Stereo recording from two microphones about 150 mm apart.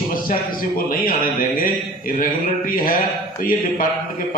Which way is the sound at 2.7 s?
65° left (ahead or behind).